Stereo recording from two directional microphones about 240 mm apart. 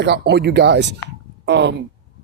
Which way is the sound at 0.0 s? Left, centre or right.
Right.